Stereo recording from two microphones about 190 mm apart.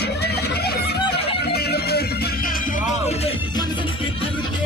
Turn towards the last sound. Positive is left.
turn(degrees=20)  # may be behind; listen again after turning